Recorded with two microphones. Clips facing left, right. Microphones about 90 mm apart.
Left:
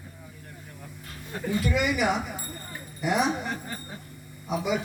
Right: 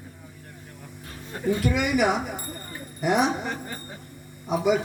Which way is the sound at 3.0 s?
50° right (ahead or behind).